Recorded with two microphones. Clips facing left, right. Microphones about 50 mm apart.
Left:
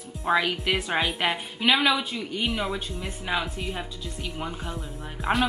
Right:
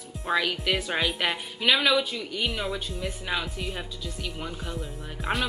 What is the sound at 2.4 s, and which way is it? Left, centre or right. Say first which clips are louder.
Speech: left 2 dB; centre.